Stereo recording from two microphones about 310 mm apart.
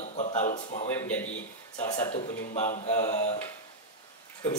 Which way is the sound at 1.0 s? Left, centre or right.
Centre.